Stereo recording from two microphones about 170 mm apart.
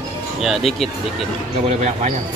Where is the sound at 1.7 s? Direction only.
40° right (ahead or behind).